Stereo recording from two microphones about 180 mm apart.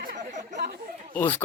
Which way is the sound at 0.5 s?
60° right (ahead or behind).